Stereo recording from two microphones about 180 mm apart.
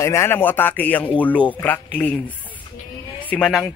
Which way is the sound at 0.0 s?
15° left (ahead or behind).